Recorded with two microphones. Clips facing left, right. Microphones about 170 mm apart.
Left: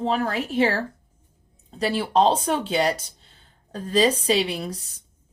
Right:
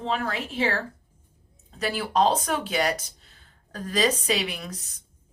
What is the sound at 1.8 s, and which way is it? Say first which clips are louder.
Speech: left 3 dB; 30° left (ahead or behind).